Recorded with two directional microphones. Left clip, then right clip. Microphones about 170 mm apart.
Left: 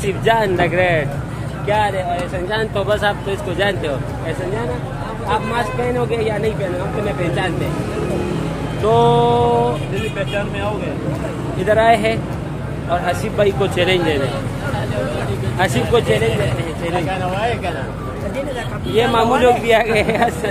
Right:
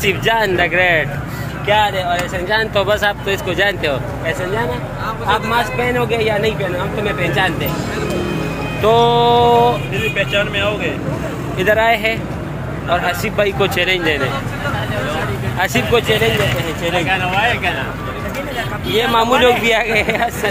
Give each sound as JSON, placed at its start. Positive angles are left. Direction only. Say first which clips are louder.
{"t": 0.0, "sound": "speech", "louder": "right 1 dB", "side_deg": -10}
{"t": 2.5, "sound": "speech", "louder": "right 4 dB", "side_deg": -15}
{"t": 5.6, "sound": "speech", "louder": "right 2 dB", "side_deg": -10}
{"t": 8.8, "sound": "speech", "louder": "right 2 dB", "side_deg": -15}
{"t": 11.6, "sound": "speech", "louder": "even", "side_deg": -15}
{"t": 15.6, "sound": "speech", "louder": "right 1 dB", "side_deg": -15}
{"t": 17.1, "sound": "speech", "louder": "right 4 dB", "side_deg": 60}
{"t": 18.9, "sound": "speech", "louder": "right 1 dB", "side_deg": -20}